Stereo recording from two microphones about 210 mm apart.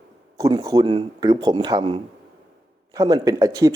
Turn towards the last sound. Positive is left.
turn(degrees=-15)  # may be behind; listen again after turning